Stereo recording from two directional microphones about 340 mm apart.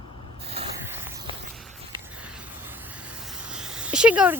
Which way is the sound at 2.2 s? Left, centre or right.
Centre.